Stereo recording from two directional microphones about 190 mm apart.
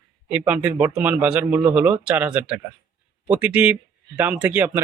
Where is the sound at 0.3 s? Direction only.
10° right (ahead or behind).